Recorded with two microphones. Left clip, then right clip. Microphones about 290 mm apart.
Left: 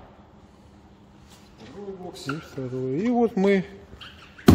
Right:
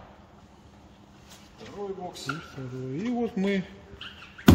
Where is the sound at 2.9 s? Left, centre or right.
Centre.